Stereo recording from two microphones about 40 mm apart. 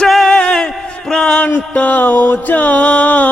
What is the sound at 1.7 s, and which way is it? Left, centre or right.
Music, left.